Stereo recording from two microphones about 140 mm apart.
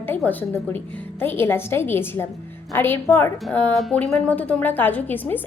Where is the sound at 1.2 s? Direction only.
15° left (ahead or behind).